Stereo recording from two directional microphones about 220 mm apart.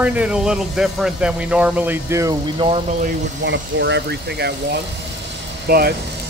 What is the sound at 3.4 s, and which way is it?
Speech, 55° right (ahead or behind).